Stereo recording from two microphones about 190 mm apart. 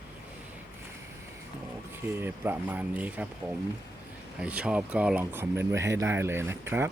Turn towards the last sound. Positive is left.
turn(degrees=-10)  # may be behind; listen again after turning